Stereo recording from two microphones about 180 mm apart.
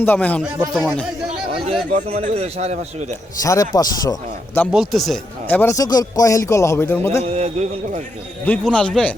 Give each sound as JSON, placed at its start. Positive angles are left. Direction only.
{"t": 0.0, "sound": "a man's voice", "side_deg": 10}
{"t": 1.9, "sound": "a man's voice", "side_deg": -40}
{"t": 3.4, "sound": "a man's voice", "side_deg": 20}
{"t": 4.7, "sound": "speech", "side_deg": 0}
{"t": 7.3, "sound": "a man's voice", "side_deg": -40}
{"t": 8.4, "sound": "a man's voice", "side_deg": 5}